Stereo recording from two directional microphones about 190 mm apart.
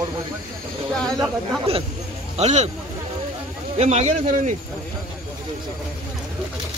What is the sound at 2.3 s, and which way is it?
Speech, 35° right (ahead or behind).